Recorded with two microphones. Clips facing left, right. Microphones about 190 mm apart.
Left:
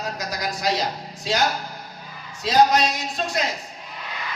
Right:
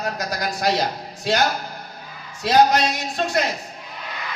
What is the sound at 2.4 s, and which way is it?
Speech, 60° right (ahead or behind).